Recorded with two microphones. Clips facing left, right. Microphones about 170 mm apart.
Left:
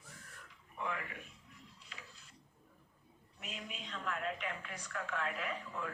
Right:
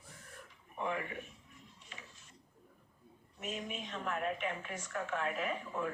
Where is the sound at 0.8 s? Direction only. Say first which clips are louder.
Right 4 dB; 25° right (ahead or behind).